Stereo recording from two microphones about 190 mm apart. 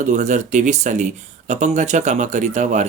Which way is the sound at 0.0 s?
40° right (ahead or behind).